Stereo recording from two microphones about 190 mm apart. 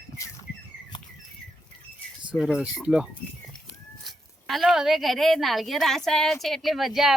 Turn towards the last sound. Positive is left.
turn(degrees=0)  # may be behind; listen again after turning